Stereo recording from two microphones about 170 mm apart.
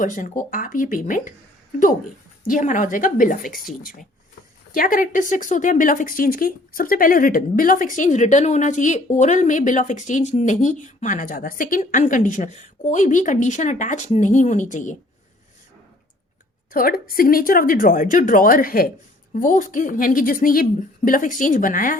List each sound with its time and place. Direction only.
0.0 s speech: 50° left (ahead or behind)
2.4 s speech: 50° left (ahead or behind)
4.7 s speech: 55° left (ahead or behind)
16.7 s a woman's voice: 60° left (ahead or behind)